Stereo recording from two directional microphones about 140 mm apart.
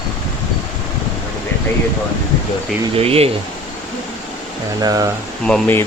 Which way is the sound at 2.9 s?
45° right (ahead or behind).